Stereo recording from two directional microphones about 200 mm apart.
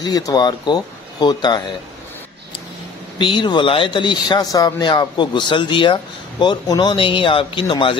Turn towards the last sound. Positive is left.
turn(degrees=25)  # may be behind; listen again after turning